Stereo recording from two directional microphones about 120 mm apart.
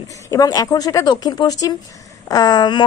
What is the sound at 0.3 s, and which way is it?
Speech, 30° left (ahead or behind).